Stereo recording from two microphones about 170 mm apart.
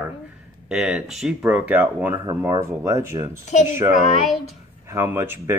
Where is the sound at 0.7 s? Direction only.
5° right (ahead or behind).